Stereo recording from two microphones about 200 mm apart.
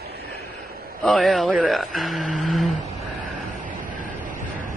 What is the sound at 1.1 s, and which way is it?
Speech, centre (ahead or behind).